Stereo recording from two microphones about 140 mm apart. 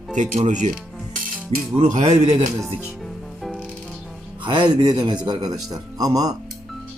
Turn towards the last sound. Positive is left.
turn(degrees=-25)  # may be behind; listen again after turning